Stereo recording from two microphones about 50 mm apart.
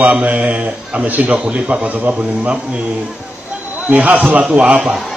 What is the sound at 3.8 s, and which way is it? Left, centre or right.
A man's voice, right.